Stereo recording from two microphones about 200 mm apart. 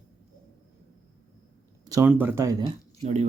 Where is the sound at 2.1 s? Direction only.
10° right (ahead or behind).